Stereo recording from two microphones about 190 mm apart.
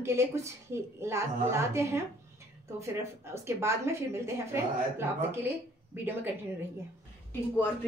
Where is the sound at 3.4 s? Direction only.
15° right (ahead or behind).